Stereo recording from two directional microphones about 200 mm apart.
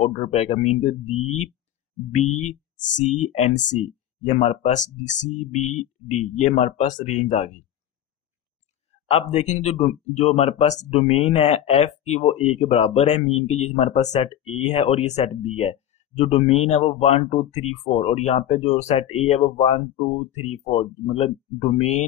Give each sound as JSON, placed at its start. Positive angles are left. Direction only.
{"t": 0.0, "sound": "speech", "side_deg": 30}
{"t": 9.3, "sound": "speech", "side_deg": 35}